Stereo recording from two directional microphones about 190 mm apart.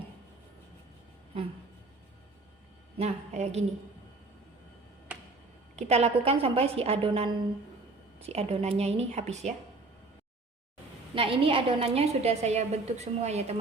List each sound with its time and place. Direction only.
3.0 s a woman's voice: 35° right (ahead or behind)
5.7 s a woman's voice: 35° right (ahead or behind)
11.1 s a woman's voice: 30° right (ahead or behind)